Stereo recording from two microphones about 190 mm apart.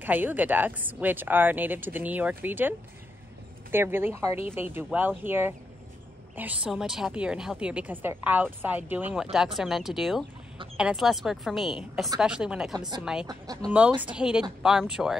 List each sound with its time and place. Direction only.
0.0 s a woman's voice: 10° right (ahead or behind)
3.7 s a woman's voice: 10° right (ahead or behind)
13.3 s speech: 20° right (ahead or behind)
13.7 s a woman's voice: 10° right (ahead or behind)